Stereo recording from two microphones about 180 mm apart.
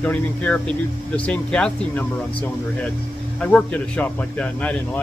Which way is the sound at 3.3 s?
5° left (ahead or behind).